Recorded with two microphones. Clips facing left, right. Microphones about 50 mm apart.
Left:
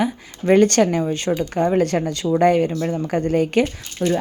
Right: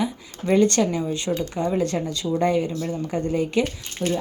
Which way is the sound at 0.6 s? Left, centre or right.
Left.